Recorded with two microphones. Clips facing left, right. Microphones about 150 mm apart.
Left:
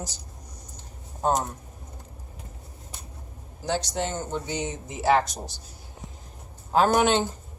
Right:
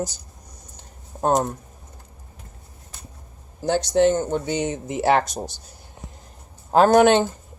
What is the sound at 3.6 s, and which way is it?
Speech, 60° right (ahead or behind).